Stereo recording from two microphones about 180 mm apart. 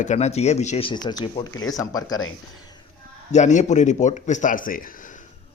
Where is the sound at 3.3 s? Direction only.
40° left (ahead or behind).